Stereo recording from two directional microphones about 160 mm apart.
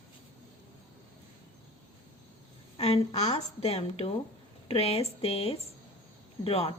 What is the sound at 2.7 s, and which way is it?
A woman's voice, 40° left (ahead or behind).